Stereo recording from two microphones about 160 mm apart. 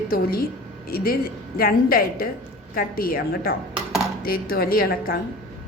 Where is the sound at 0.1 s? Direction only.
70° left (ahead or behind).